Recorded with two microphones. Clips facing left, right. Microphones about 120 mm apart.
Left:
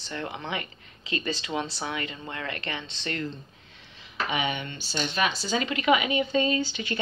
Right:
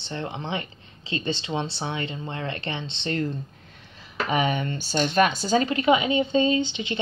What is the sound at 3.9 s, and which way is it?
Speech, 40° right (ahead or behind).